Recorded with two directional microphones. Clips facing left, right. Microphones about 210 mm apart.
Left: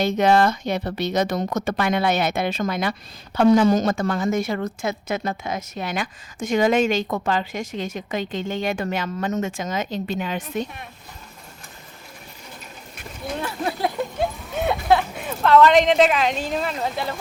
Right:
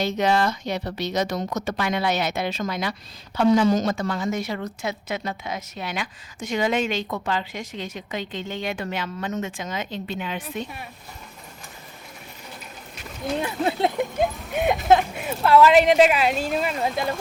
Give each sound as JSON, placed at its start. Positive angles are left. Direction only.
{"t": 0.0, "sound": "a woman's voice", "side_deg": 55}
{"t": 13.4, "sound": "speech", "side_deg": -20}